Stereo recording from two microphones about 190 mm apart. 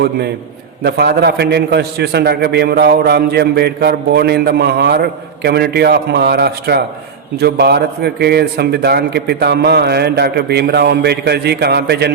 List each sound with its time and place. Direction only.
0.8 s a man's voice: 55° right (ahead or behind)